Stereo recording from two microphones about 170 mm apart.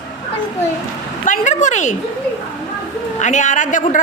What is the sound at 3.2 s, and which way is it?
Speech, 45° left (ahead or behind).